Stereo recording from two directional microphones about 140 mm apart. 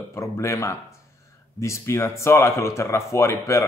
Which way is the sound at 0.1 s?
20° left (ahead or behind).